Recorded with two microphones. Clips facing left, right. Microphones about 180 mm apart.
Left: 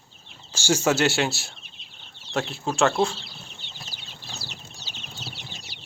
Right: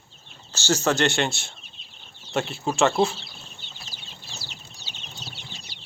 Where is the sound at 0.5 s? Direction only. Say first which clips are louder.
Left 1 dB; 10° left (ahead or behind).